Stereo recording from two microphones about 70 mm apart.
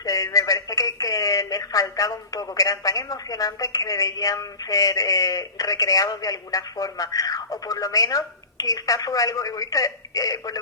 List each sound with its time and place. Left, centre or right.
0.0 s speech: left